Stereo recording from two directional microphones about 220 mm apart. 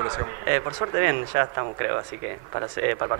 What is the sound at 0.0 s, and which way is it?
Speech, 25° right (ahead or behind).